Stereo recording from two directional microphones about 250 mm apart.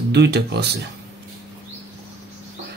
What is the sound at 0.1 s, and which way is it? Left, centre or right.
Speech, right.